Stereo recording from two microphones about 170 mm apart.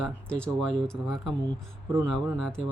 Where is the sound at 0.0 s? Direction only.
5° left (ahead or behind).